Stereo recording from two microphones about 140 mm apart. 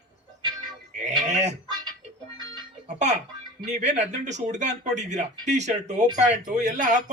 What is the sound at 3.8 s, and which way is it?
Speech, 55° right (ahead or behind).